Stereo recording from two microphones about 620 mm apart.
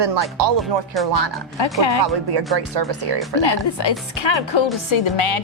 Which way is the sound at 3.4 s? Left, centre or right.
Left.